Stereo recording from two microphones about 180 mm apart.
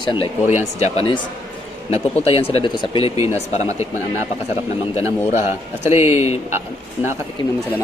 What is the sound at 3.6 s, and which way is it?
Speech, 15° right (ahead or behind).